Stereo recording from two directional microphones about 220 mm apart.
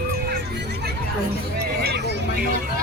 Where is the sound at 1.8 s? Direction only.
45° right (ahead or behind).